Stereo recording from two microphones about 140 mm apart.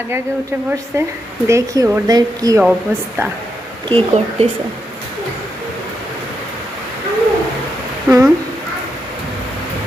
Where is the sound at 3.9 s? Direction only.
45° right (ahead or behind).